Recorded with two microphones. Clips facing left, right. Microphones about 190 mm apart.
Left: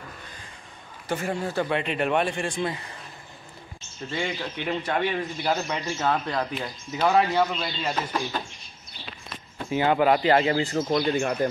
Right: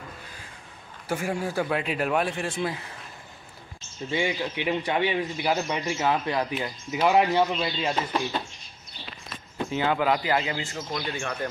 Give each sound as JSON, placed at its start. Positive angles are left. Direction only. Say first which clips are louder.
{"t": 1.0, "sound": "a man's voice", "louder": "even", "side_deg": -10}
{"t": 4.1, "sound": "speech", "louder": "right 3 dB", "side_deg": -10}
{"t": 9.7, "sound": "speech", "louder": "left 4 dB", "side_deg": 15}
{"t": 10.3, "sound": "speech", "louder": "left 6 dB", "side_deg": 35}